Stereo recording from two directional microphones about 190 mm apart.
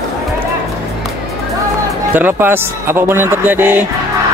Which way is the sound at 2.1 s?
10° right (ahead or behind).